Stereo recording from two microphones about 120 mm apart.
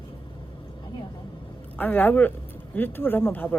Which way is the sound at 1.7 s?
15° left (ahead or behind).